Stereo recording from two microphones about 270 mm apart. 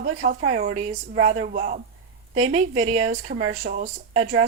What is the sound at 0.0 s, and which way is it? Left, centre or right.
Speech, right.